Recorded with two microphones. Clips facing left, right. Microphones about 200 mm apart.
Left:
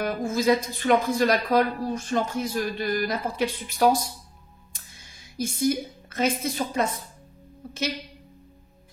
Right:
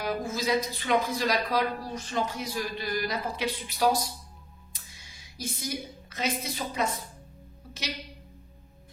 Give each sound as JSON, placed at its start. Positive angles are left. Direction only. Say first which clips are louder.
{"t": 0.0, "sound": "a woman's voice", "louder": "left 6 dB", "side_deg": 50}